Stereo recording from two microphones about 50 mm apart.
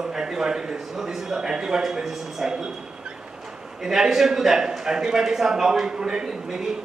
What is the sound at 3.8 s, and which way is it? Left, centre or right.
A man's voice, centre.